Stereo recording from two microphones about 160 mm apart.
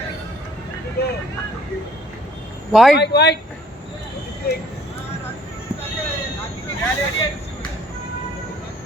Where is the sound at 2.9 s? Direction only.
90° left.